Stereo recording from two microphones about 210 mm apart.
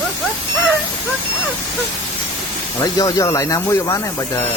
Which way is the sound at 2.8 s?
15° left (ahead or behind).